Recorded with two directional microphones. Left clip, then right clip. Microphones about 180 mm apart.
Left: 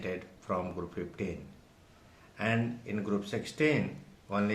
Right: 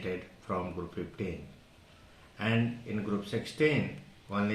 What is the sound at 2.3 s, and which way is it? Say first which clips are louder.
Speech: even; 15° left (ahead or behind).